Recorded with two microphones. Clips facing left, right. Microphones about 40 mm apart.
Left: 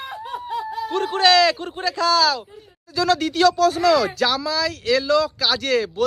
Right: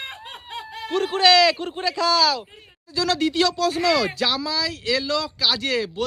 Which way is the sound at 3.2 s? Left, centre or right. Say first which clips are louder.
Left 4 dB; right.